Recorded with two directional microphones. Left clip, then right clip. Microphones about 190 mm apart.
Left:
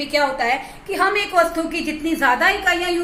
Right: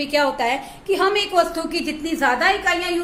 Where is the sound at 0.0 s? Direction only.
55° right (ahead or behind).